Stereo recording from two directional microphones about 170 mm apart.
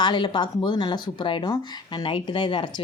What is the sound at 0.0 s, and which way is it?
Speech, 25° left (ahead or behind).